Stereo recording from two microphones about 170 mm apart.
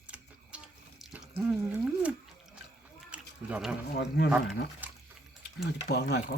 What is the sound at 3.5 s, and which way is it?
Speech, 5° right (ahead or behind).